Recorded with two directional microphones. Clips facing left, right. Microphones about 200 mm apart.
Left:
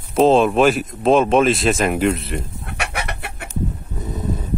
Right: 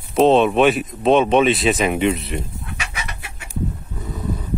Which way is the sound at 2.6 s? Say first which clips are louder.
Left 5 dB; 65° left (ahead or behind).